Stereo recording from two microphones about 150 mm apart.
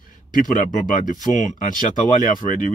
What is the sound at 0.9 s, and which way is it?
Speech, 55° left (ahead or behind).